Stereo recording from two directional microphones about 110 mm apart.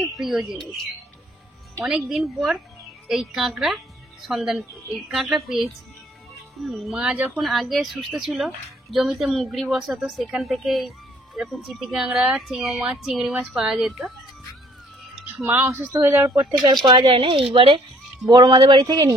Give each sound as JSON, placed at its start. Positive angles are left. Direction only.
{"t": 0.0, "sound": "speech", "side_deg": 0}
{"t": 1.9, "sound": "speech", "side_deg": 0}
{"t": 15.4, "sound": "speech", "side_deg": -25}
{"t": 16.6, "sound": "speech", "side_deg": -45}
{"t": 18.3, "sound": "speech", "side_deg": -35}